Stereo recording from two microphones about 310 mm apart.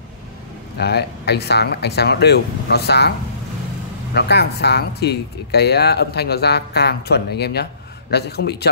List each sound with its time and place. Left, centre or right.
0.7 s speech: left
4.1 s speech: left